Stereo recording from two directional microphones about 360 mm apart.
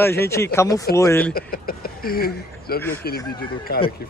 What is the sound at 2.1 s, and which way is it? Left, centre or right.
Speech, left.